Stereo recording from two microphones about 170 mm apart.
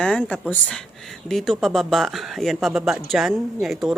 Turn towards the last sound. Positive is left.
turn(degrees=0)  # may be behind; listen again after turning